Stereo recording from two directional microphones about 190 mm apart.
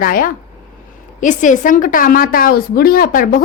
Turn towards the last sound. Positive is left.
turn(degrees=50)  # may be behind; listen again after turning